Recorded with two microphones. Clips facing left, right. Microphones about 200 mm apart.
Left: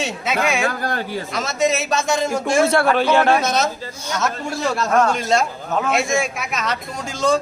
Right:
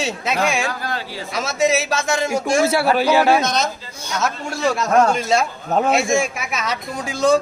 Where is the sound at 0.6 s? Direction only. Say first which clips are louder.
Left 3 dB; 50° left (ahead or behind).